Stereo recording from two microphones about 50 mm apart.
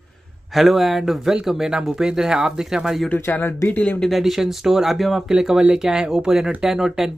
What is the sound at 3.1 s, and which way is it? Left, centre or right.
Speech, left.